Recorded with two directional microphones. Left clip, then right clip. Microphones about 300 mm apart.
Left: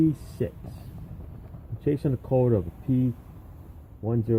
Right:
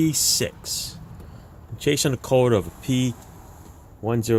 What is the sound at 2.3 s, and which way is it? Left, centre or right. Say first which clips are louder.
Speech: right 5 dB; right.